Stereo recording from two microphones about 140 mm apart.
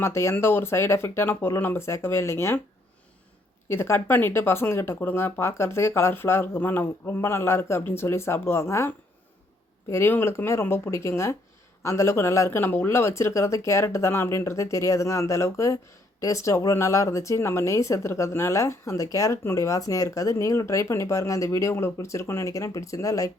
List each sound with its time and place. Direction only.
0.0 s speech: 20° left (ahead or behind)
3.7 s speech: 20° left (ahead or behind)
9.9 s speech: 15° left (ahead or behind)